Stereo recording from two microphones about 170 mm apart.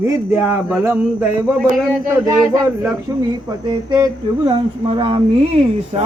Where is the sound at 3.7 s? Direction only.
25° right (ahead or behind).